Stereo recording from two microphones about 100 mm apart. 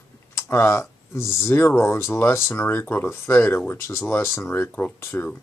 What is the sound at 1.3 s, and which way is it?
Speech, 25° left (ahead or behind).